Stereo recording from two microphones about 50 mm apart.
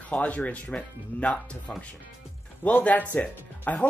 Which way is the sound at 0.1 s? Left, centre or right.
Left.